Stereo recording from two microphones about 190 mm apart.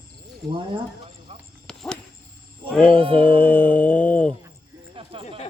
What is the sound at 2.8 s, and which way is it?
Speech, 30° right (ahead or behind).